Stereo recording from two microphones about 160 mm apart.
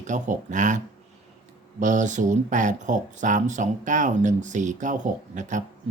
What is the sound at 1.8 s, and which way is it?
Speech, 50° right (ahead or behind).